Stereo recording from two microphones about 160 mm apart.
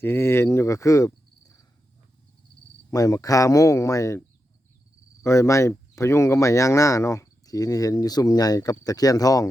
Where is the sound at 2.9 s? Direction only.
20° left (ahead or behind).